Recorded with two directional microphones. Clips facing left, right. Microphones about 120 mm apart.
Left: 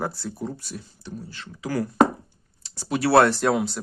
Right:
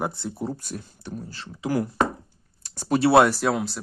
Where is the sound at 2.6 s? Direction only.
50° right (ahead or behind).